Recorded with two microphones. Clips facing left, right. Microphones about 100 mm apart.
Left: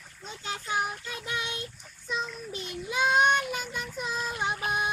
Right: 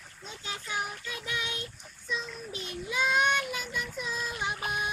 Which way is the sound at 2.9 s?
35° left (ahead or behind).